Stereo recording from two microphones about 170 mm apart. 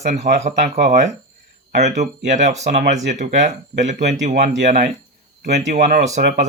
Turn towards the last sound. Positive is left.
turn(degrees=-45)  # may be behind; listen again after turning